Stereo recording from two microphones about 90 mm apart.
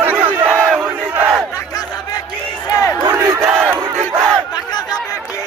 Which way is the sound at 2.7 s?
35° left (ahead or behind).